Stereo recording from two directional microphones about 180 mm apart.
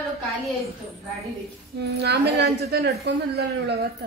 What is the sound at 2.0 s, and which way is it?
Speech, 65° right (ahead or behind).